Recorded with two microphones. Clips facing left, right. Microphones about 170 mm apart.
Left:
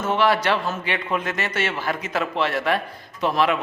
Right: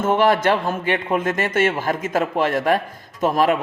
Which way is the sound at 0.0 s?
50° right (ahead or behind).